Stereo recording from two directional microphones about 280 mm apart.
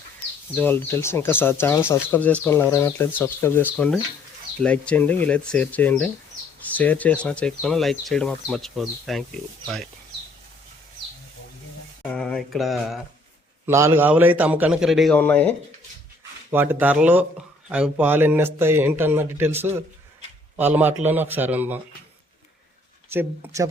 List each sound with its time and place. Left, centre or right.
0.5 s speech: centre
12.1 s speech: centre
16.5 s speech: centre
23.1 s speech: centre